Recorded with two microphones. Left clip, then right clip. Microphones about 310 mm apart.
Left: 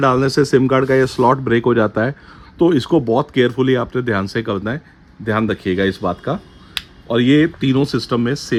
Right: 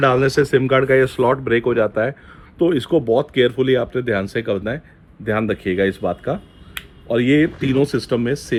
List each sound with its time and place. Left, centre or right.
0.0 s speech: left